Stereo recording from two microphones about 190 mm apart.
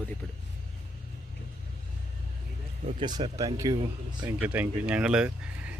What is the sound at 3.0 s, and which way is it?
Speech, 20° right (ahead or behind).